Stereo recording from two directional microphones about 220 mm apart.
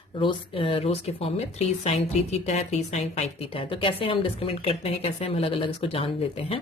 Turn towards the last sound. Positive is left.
turn(degrees=25)  # may be behind; listen again after turning